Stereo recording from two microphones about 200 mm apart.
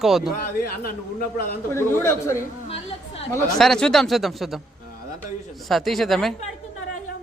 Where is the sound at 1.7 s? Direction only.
10° left (ahead or behind).